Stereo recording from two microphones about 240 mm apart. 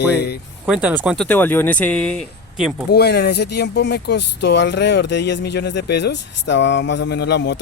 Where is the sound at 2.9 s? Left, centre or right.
Left.